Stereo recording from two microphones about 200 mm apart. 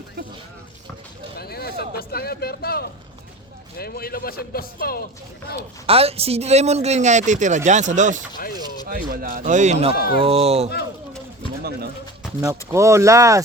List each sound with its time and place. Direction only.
1.4 s a sound: 50° left (ahead or behind)
3.8 s a man's voice: 50° left (ahead or behind)
5.8 s speech: 30° right (ahead or behind)
12.4 s speech: 15° right (ahead or behind)